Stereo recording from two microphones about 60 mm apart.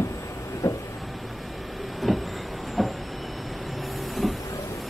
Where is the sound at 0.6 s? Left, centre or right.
Left.